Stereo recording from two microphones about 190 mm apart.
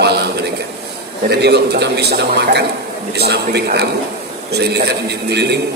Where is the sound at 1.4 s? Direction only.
60° right (ahead or behind).